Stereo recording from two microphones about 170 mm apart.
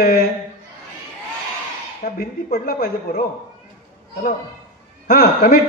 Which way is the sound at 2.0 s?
60° left (ahead or behind).